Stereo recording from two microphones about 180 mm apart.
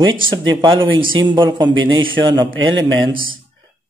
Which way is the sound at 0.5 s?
25° right (ahead or behind).